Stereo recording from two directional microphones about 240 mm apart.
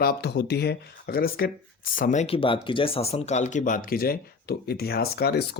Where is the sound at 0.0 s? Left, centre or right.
Left.